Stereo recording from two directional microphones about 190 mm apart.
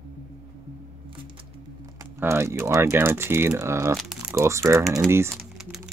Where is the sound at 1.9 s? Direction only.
15° right (ahead or behind).